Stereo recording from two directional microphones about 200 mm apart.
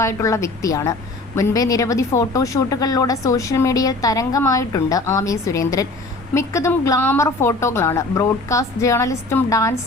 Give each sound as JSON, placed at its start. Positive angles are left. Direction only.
{"t": 0.0, "sound": "speech", "side_deg": 15}